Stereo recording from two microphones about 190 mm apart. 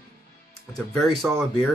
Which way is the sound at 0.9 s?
Centre (ahead or behind).